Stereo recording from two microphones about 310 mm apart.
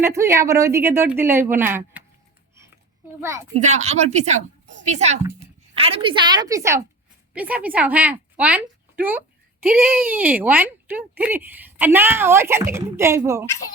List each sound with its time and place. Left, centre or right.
0.0 s a woman's voice: centre
3.2 s a woman's voice: centre
3.5 s a woman's voice: right